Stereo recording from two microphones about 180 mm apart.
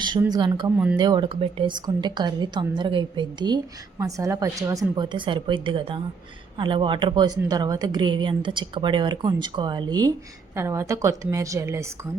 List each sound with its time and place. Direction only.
0.2 s speech: 20° right (ahead or behind)